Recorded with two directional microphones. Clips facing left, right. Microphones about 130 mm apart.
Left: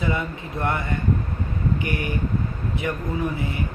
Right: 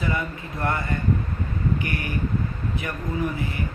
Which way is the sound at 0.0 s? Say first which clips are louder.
Left 2 dB; 20° left (ahead or behind).